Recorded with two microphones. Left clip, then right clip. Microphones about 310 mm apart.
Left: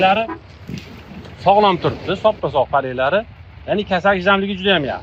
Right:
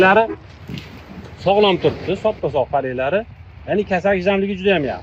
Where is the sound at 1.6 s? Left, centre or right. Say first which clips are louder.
Even; centre.